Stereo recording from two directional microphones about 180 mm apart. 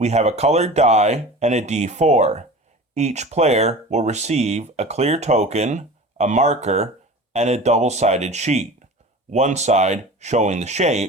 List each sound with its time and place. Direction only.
0.0 s speech: 40° right (ahead or behind)